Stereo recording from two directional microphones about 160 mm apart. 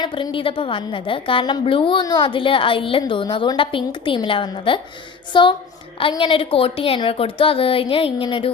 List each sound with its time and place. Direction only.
0.0 s a woman's voice: 30° left (ahead or behind)